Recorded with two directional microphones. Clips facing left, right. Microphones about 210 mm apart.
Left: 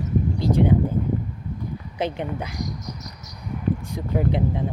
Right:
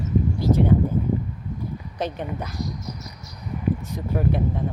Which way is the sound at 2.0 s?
10° left (ahead or behind).